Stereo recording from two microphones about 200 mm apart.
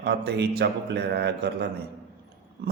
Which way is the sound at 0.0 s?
55° right (ahead or behind).